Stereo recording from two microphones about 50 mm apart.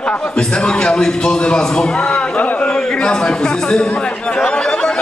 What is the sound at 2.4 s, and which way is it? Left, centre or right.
Speech, left.